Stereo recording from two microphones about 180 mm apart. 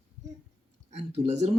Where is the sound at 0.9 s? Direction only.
35° right (ahead or behind).